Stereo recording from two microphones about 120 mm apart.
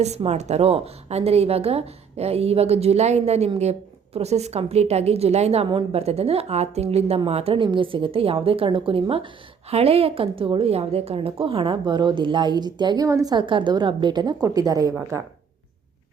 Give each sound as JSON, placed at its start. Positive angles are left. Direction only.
{"t": 0.2, "sound": "a woman's voice", "side_deg": -65}
{"t": 5.6, "sound": "a woman's voice", "side_deg": -45}
{"t": 6.0, "sound": "a woman's voice", "side_deg": -60}
{"t": 13.3, "sound": "a woman's voice", "side_deg": -45}